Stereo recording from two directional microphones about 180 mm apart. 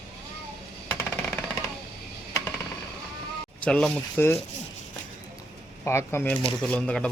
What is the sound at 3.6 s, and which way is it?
Speech, 5° left (ahead or behind).